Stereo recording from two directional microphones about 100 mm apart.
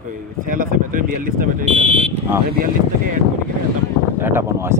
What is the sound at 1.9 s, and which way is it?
Speech, 90° right.